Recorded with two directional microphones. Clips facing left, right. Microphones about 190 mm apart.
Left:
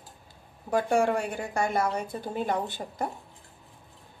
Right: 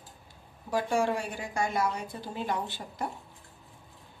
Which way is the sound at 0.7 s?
55° left (ahead or behind).